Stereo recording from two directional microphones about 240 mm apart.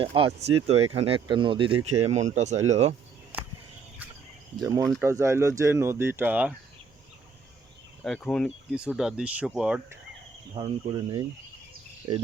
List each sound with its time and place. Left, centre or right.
0.0 s speech: right
4.5 s speech: centre
8.0 s speech: centre
10.5 s speech: centre